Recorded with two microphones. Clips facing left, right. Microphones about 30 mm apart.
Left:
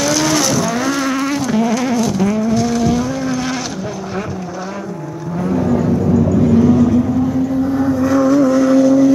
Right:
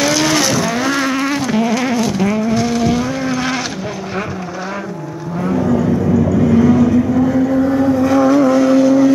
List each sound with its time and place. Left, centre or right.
0.0 s vehicle: right
6.5 s vehicle: right